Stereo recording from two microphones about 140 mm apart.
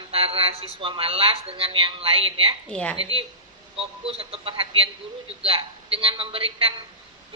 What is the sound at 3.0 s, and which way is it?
A woman's voice, 40° right (ahead or behind).